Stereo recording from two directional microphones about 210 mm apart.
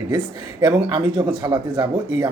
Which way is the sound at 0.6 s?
20° right (ahead or behind).